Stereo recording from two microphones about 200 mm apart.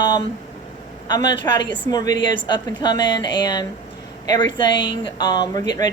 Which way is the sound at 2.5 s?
20° left (ahead or behind).